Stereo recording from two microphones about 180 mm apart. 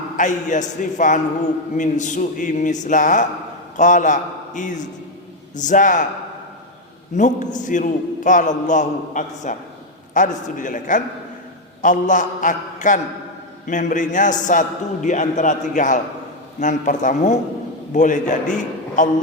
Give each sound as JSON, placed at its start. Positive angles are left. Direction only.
{"t": 0.2, "sound": "a man's voice", "side_deg": 40}
{"t": 7.2, "sound": "a man's voice", "side_deg": 45}